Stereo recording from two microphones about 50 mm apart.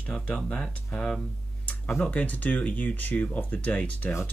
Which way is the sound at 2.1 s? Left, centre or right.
Left.